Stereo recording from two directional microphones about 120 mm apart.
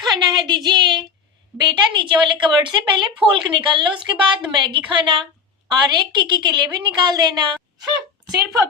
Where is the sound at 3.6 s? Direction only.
45° right (ahead or behind).